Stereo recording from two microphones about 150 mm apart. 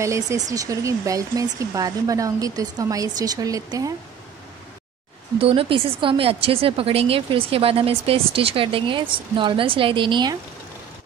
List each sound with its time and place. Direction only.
0.0 s speech: 20° right (ahead or behind)
5.4 s a woman's voice: 40° right (ahead or behind)